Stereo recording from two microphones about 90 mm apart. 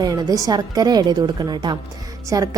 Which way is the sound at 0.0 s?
45° right (ahead or behind).